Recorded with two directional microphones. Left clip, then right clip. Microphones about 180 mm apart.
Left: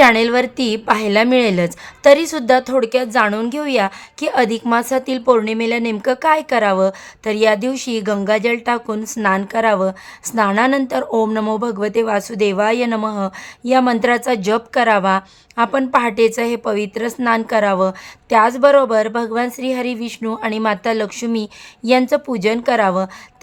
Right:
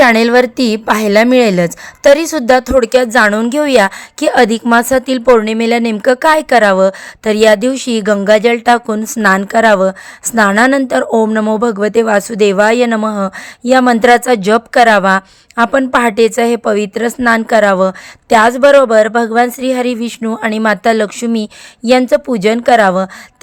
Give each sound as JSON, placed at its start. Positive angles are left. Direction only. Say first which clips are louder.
{"t": 0.0, "sound": "speech", "louder": "right 4 dB", "side_deg": -30}
{"t": 11.3, "sound": "speech", "louder": "right 6 dB", "side_deg": -15}